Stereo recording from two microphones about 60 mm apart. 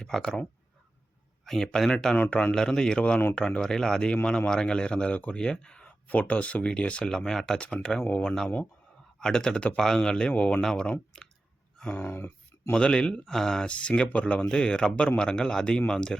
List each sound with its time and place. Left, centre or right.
0.0 s speech: centre
1.5 s speech: centre
9.1 s speech: centre
10.6 s speech: centre
11.1 s chewing: centre
11.9 s speech: left
12.7 s speech: centre